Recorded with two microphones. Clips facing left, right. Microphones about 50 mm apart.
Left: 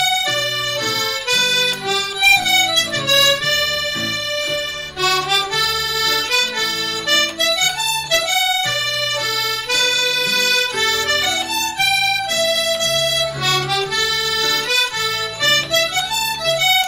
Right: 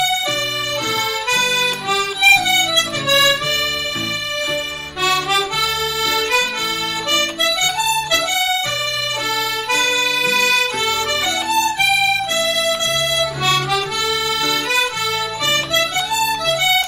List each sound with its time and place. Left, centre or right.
1.6 s music: centre
5.0 s music: centre
7.8 s music: centre
9.7 s music: right
10.8 s accordion: centre
14.4 s music: centre